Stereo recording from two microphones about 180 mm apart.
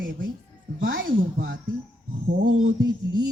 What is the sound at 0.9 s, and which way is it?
Speech, 75° right (ahead or behind).